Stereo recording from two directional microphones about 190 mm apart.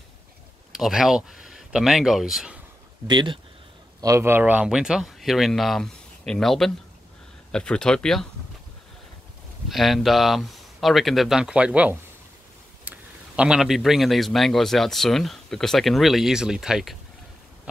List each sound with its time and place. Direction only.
0.7 s a man's voice: centre (ahead or behind)
3.1 s a man's voice: 25° right (ahead or behind); by 8.3 s 5° left (ahead or behind)
9.7 s a man's voice: centre (ahead or behind)